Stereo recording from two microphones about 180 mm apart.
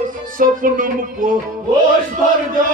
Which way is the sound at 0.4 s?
50° right (ahead or behind).